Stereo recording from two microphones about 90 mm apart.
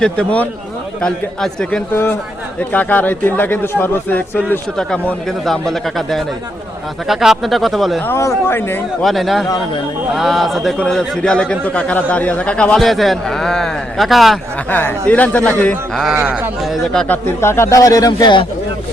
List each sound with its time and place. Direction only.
0.0 s a man's voice: 15° left (ahead or behind)
1.9 s speech: 25° left (ahead or behind)
4.8 s speech: 5° left (ahead or behind)
8.0 s speech: 30° left (ahead or behind)
9.0 s a man's voice: centre (ahead or behind)
14.7 s a man's voice: 20° left (ahead or behind)
16.6 s speech: centre (ahead or behind)
17.4 s speech: 30° left (ahead or behind)